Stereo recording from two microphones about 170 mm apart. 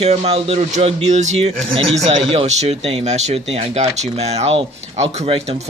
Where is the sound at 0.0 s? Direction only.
40° right (ahead or behind).